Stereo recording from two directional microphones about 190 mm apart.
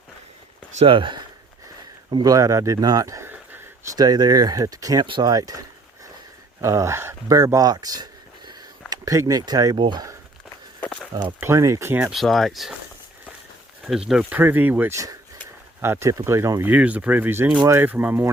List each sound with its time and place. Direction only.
0.7 s speech: 30° right (ahead or behind)
10.8 s walk: 5° left (ahead or behind)
11.1 s speech: 20° right (ahead or behind)
12.1 s speech: centre (ahead or behind)
14.1 s speech: 5° right (ahead or behind)